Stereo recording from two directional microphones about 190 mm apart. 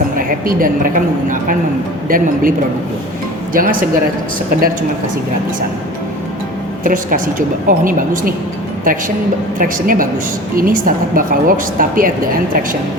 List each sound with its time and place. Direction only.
0.2 s a woman's voice: 45° right (ahead or behind)
3.5 s a woman's voice: 45° right (ahead or behind)
6.8 s a woman's voice: 45° right (ahead or behind)